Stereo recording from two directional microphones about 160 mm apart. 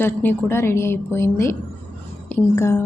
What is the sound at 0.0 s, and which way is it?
A woman's voice, 10° left (ahead or behind).